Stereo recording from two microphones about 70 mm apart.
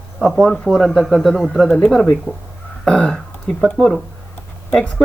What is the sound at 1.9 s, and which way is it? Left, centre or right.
Speech, centre.